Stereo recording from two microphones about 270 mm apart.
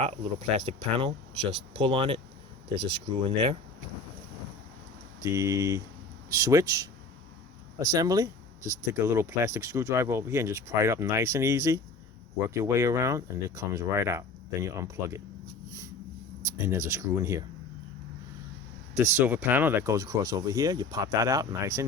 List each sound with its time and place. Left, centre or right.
0.5 s speech: right
3.2 s speech: centre
5.2 s speech: centre
16.4 s speech: centre
18.9 s speech: centre